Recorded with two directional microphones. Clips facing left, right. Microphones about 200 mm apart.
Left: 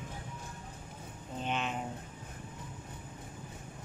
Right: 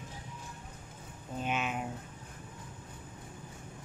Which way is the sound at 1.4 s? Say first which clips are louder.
Right 1 dB; 10° right (ahead or behind).